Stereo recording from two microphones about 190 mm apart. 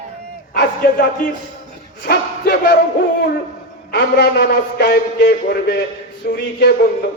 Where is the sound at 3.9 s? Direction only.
60° left (ahead or behind).